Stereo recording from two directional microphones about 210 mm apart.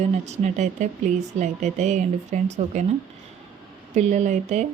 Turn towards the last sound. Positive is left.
turn(degrees=-35)  # may be behind; listen again after turning